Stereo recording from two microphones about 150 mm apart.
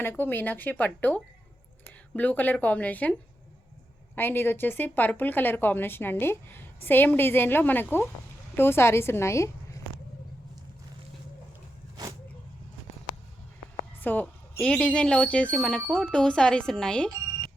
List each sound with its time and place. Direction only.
0.0 s a woman's voice: 15° left (ahead or behind)
14.0 s speech: 15° left (ahead or behind)